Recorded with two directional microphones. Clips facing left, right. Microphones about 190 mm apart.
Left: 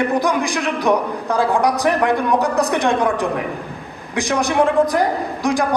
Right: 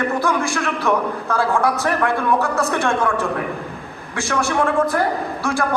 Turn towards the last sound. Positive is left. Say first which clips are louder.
# left 3 dB
turn(degrees=15)  # may be behind; listen again after turning